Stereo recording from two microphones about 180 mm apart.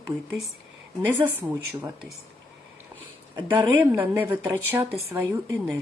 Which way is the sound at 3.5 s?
10° right (ahead or behind).